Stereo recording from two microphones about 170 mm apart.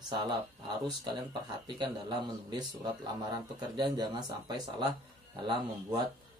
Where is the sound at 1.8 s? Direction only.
25° right (ahead or behind).